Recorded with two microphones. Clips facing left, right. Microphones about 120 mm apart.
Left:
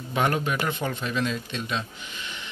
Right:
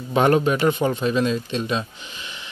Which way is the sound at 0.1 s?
30° right (ahead or behind).